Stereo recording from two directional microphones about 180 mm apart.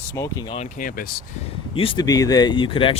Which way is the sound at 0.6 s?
50° left (ahead or behind).